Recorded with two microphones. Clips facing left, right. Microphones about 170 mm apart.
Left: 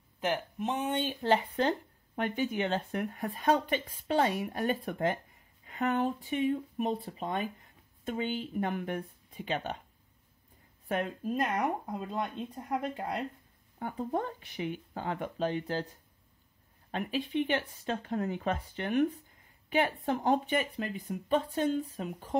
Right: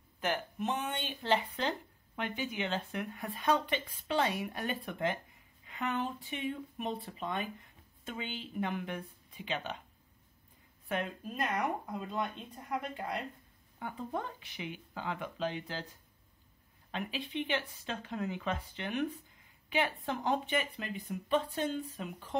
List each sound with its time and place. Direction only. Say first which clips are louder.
0.2 s speech: left 2 dB; 25° left (ahead or behind); by 9.8 s 45° left (ahead or behind)
10.9 s speech: left 5 dB; 40° left (ahead or behind)
13.7 s speech: left 5 dB; 40° left (ahead or behind)
16.9 s speech: left 6 dB; 45° left (ahead or behind)